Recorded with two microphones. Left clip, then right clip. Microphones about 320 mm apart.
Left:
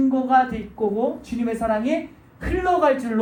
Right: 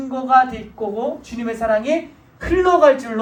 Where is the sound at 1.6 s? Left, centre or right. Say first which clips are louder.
Right 6 dB; right.